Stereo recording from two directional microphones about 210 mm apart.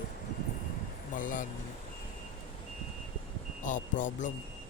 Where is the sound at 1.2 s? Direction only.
40° left (ahead or behind).